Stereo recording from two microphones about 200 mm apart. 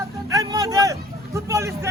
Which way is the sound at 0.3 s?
15° right (ahead or behind).